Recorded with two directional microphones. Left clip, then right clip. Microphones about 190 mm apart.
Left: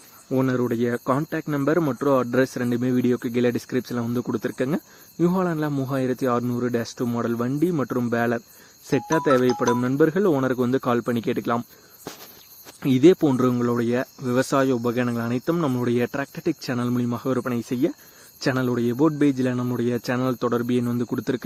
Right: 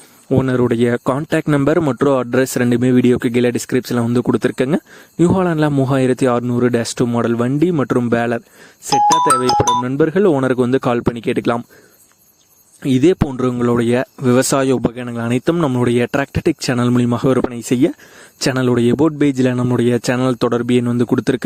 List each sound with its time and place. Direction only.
0.3 s speech: 55° right (ahead or behind)
12.8 s speech: 35° right (ahead or behind); by 21.4 s 50° right (ahead or behind)